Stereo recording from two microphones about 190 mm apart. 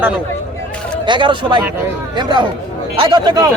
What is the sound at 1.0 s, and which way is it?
A man's voice, 25° right (ahead or behind).